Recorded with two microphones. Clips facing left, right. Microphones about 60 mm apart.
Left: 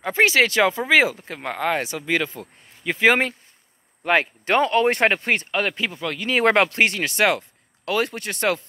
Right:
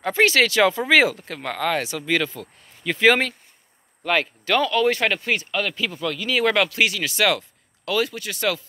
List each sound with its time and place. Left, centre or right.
0.1 s speech: left